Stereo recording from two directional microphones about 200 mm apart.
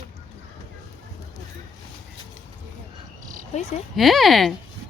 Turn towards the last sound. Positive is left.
turn(degrees=0)  # may be behind; listen again after turning